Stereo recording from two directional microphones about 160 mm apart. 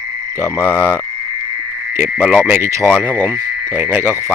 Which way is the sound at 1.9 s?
10° right (ahead or behind).